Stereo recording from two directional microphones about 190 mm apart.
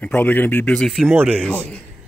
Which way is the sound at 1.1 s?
10° right (ahead or behind).